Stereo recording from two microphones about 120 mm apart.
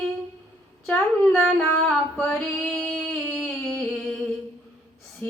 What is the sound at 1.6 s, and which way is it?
Female singing, 15° left (ahead or behind).